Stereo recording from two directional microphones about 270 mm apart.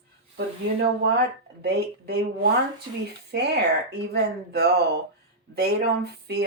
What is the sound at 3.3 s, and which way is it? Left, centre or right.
Speech, right.